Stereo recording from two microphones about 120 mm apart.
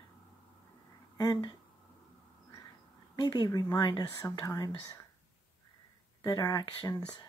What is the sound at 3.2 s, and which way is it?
Speech, 35° left (ahead or behind).